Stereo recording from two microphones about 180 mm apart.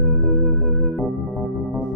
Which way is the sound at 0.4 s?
Centre (ahead or behind).